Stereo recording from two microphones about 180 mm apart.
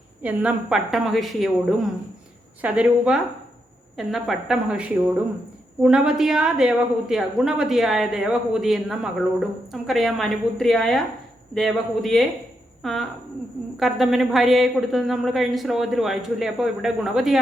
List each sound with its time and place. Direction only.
0.2 s a woman's voice: 10° right (ahead or behind)